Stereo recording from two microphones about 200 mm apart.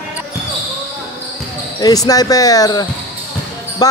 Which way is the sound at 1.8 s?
20° left (ahead or behind).